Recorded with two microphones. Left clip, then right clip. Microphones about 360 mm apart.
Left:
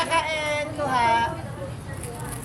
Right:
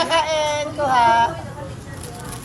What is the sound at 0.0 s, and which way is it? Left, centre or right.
Child singing, centre.